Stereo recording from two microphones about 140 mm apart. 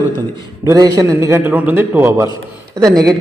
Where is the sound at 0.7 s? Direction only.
25° right (ahead or behind).